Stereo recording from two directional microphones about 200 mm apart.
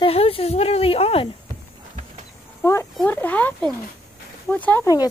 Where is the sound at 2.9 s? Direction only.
5° left (ahead or behind).